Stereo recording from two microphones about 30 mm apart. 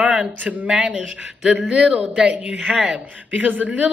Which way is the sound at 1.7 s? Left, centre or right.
Right.